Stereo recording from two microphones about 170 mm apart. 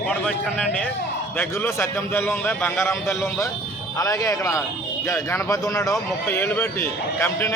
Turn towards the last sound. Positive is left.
turn(degrees=10)  # may be behind; listen again after turning